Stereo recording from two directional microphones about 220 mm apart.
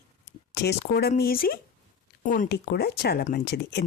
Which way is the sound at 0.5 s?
50° left (ahead or behind).